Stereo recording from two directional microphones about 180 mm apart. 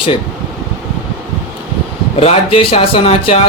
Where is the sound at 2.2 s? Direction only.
30° left (ahead or behind).